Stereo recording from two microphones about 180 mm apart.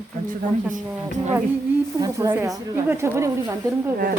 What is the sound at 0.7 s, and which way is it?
Speech, 45° right (ahead or behind).